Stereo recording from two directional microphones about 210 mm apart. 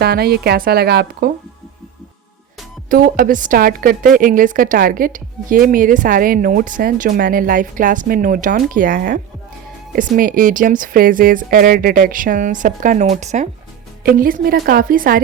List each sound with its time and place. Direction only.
0.0 s speech: 50° right (ahead or behind)
2.9 s a woman's voice: 40° right (ahead or behind)